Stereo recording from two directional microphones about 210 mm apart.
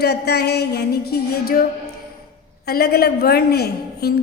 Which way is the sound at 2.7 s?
50° left (ahead or behind).